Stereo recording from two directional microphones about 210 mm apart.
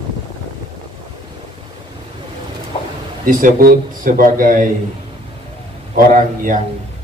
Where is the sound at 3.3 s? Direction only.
40° right (ahead or behind).